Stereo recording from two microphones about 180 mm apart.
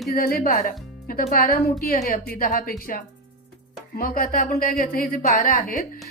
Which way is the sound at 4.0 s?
50° left (ahead or behind).